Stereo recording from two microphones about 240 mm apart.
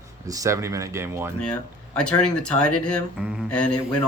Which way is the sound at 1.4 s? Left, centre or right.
Centre.